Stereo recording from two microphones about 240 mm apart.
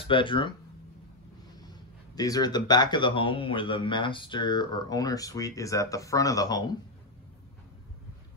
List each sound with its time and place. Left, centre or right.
0.0 s speech: left
2.1 s a man's voice: centre